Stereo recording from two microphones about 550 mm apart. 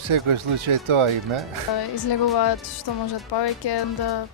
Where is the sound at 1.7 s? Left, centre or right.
Left.